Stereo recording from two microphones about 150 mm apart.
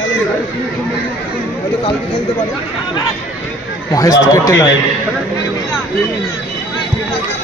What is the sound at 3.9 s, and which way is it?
Speech, 20° left (ahead or behind).